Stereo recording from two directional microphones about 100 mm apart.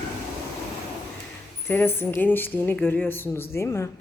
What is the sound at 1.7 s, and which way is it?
A woman's voice, 20° left (ahead or behind).